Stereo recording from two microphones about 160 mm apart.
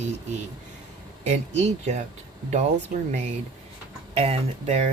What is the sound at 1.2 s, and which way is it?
Speech, 45° right (ahead or behind).